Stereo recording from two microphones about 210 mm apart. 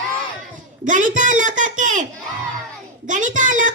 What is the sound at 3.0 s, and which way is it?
Speech, 35° right (ahead or behind).